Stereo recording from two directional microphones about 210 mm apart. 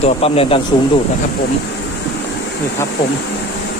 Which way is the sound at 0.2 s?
30° left (ahead or behind).